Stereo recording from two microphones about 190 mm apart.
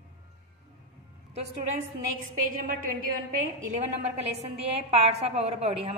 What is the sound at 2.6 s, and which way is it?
A woman's voice, 45° right (ahead or behind).